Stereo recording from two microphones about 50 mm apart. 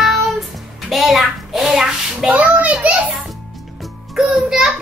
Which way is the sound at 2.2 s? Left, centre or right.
Right.